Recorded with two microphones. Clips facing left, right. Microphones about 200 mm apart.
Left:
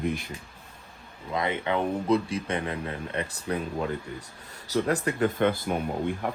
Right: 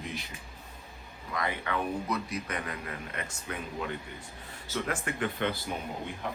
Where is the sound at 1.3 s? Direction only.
25° left (ahead or behind).